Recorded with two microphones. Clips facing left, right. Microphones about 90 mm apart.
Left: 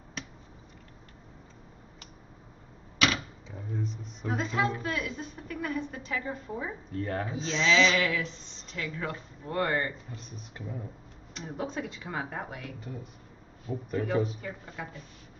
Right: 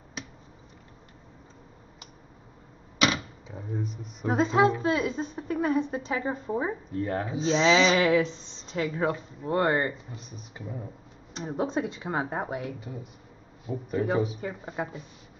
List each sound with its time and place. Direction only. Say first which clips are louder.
0.2 s finger snapping: right 1 dB; 5° right (ahead or behind)
3.0 s a sound: right 2 dB; 15° right (ahead or behind)
4.3 s a woman's voice: right 7 dB; 25° right (ahead or behind)
6.9 s speech: right 3 dB; 10° right (ahead or behind)
7.4 s a woman's voice: right 4 dB; 30° right (ahead or behind)
10.1 s speech: right 1 dB; 5° right (ahead or behind)
11.3 s a woman's voice: right 6 dB; 25° right (ahead or behind)
12.8 s speech: right 1 dB; 5° right (ahead or behind)
14.4 s a woman's voice: right 6 dB; 30° right (ahead or behind)